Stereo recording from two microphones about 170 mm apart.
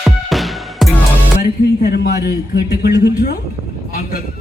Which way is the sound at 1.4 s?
70° left (ahead or behind).